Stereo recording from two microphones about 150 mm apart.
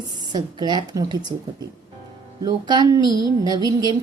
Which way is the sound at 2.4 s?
25° right (ahead or behind).